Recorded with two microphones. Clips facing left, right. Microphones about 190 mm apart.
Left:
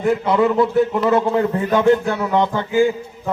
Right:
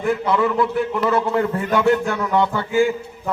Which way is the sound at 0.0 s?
20° left (ahead or behind).